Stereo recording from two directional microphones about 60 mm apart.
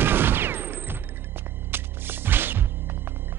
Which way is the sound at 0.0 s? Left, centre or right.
Right.